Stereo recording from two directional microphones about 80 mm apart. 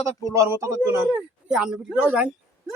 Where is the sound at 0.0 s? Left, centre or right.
Right.